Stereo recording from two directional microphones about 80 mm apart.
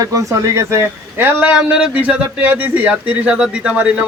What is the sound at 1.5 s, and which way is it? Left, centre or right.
Speech, centre.